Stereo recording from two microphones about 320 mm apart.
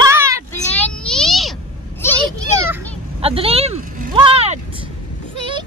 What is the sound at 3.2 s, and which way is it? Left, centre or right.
Vehicle, centre.